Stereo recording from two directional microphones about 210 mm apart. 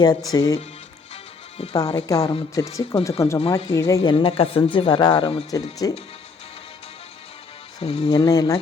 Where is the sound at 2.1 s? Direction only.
25° left (ahead or behind).